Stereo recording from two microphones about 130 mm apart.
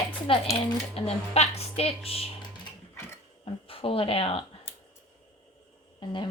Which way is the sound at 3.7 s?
45° left (ahead or behind).